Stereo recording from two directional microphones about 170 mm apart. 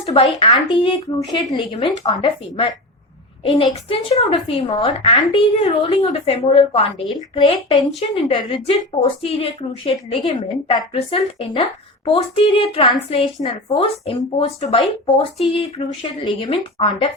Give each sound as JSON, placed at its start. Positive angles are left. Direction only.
{"t": 0.0, "sound": "a woman's voice", "side_deg": 35}